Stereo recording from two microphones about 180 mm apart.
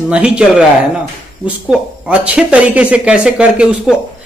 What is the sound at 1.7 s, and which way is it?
A man's voice, 5° right (ahead or behind).